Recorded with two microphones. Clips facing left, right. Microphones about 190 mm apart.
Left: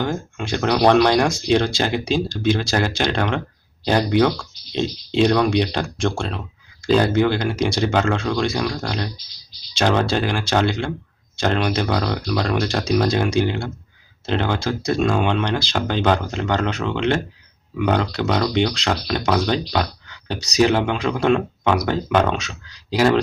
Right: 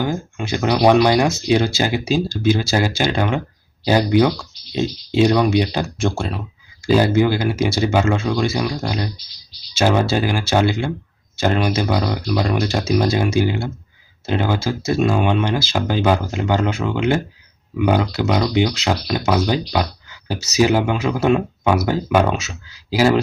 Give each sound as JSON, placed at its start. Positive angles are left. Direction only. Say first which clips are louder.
{"t": 0.0, "sound": "speech", "louder": "right 2 dB", "side_deg": -5}